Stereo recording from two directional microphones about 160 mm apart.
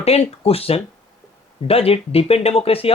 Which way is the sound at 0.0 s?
40° left (ahead or behind).